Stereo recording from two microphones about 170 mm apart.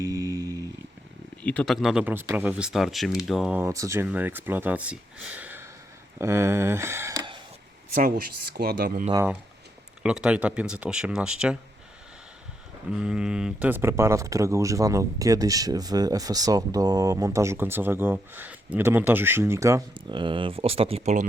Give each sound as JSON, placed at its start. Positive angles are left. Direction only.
{"t": 0.0, "sound": "a sound", "side_deg": -20}
{"t": 1.4, "sound": "speech", "side_deg": 5}
{"t": 7.9, "sound": "speech", "side_deg": -55}
{"t": 9.1, "sound": "speech", "side_deg": -10}
{"t": 13.0, "sound": "speech", "side_deg": -5}
{"t": 19.9, "sound": "speech", "side_deg": -30}